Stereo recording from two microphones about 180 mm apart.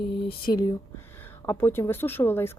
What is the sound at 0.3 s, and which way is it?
Speech, 25° left (ahead or behind).